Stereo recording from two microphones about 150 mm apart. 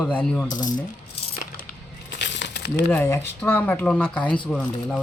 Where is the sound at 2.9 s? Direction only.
15° left (ahead or behind).